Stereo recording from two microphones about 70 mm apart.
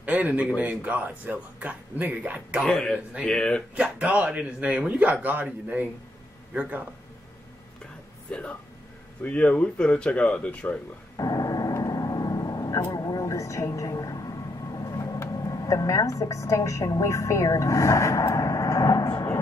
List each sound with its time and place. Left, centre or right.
0.0 s a sound: centre
0.6 s speech: right
2.6 s speech: centre
4.0 s a man's voice: right
8.3 s speech: centre
11.1 s a sound: left
12.9 s vehicle: left
15.1 s a woman's voice: left